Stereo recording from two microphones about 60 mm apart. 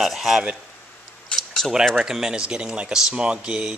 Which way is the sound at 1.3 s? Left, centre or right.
Centre.